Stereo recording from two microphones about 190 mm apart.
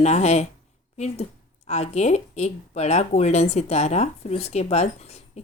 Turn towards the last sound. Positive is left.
turn(degrees=35)  # may be behind; listen again after turning